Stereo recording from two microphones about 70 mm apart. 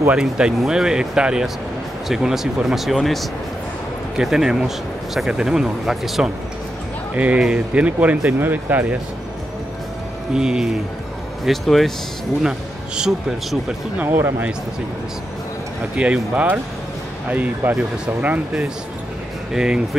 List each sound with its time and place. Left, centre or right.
0.1 s speech: centre
7.2 s speech: centre
10.3 s speech: centre
11.4 s speech: centre
12.4 s speech: centre
14.0 s speech: right
15.8 s speech: centre
19.5 s speech: centre